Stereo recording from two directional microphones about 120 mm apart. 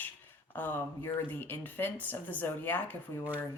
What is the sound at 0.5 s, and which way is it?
Speech, 15° left (ahead or behind).